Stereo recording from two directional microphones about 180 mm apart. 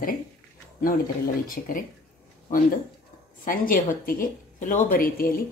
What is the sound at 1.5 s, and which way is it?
Speech, 50° left (ahead or behind).